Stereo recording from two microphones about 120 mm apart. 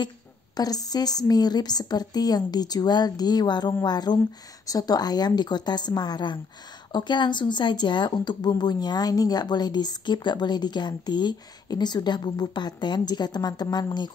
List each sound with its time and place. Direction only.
0.6 s speech: 30° left (ahead or behind)